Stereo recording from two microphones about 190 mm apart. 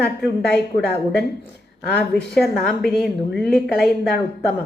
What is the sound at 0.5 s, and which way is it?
Speech, 60° left (ahead or behind).